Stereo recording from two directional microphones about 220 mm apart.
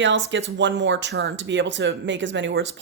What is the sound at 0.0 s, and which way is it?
Speech, 55° right (ahead or behind).